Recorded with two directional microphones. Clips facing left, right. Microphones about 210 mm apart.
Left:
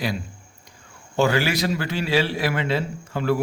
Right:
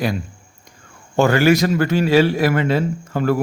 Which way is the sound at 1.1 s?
50° right (ahead or behind).